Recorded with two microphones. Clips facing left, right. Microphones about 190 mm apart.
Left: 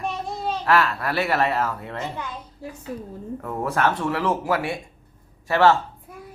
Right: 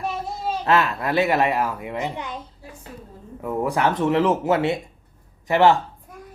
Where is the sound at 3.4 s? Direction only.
15° right (ahead or behind).